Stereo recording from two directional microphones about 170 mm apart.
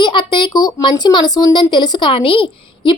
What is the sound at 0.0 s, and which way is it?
Speech, 25° left (ahead or behind).